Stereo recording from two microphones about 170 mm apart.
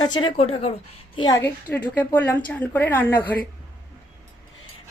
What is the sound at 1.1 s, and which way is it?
Speech, 25° left (ahead or behind).